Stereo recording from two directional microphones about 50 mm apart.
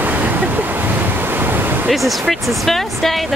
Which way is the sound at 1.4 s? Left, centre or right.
Right.